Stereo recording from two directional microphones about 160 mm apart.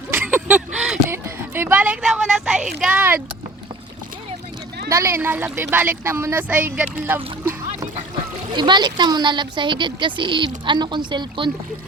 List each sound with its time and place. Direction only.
0.1 s a sound: 10° right (ahead or behind)
4.9 s speech: 15° right (ahead or behind)
8.5 s a woman's voice: 30° right (ahead or behind)